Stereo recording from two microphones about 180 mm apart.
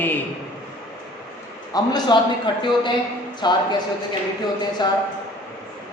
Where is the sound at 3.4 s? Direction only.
25° left (ahead or behind).